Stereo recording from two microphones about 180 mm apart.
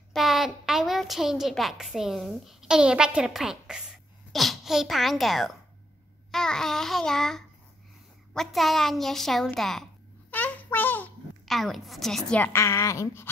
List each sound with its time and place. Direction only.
0.1 s a woman's voice: centre (ahead or behind); by 13.3 s 15° left (ahead or behind)